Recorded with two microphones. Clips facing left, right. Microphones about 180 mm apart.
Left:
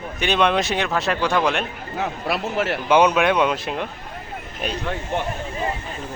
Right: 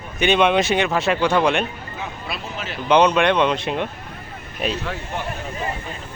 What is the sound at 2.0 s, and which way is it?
Speech, 70° left (ahead or behind).